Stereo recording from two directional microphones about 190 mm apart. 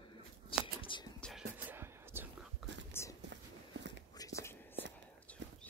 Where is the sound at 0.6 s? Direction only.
25° left (ahead or behind).